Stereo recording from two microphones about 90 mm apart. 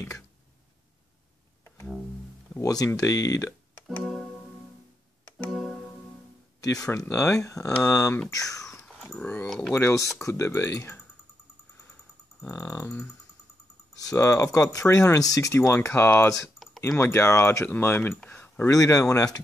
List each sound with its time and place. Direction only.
2.6 s speech: 45° left (ahead or behind)
4.0 s music: 5° left (ahead or behind)
5.5 s music: centre (ahead or behind)
6.6 s speech: 40° left (ahead or behind)
6.9 s speech: 30° left (ahead or behind)
8.8 s dog: 5° right (ahead or behind)
9.5 s speech: 5° left (ahead or behind)
10.2 s speech: 30° left (ahead or behind)
12.4 s speech: 30° left (ahead or behind)
14.1 s speech: 35° left (ahead or behind)
18.3 s a sound: 25° left (ahead or behind)
18.7 s speech: 40° left (ahead or behind)